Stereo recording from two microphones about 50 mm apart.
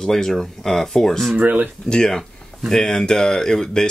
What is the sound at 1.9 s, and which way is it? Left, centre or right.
Speech, centre.